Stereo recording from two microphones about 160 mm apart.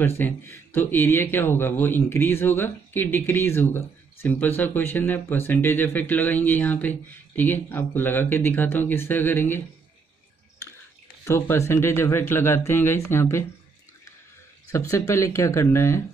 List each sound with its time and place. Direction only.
0.0 s speech: 15° left (ahead or behind)
11.2 s speech: 15° left (ahead or behind)
14.7 s speech: 20° left (ahead or behind)